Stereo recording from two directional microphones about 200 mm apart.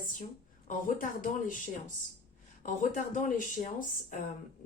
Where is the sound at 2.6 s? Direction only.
40° left (ahead or behind).